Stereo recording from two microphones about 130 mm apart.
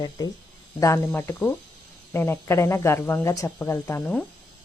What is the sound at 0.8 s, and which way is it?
Speech, 25° left (ahead or behind).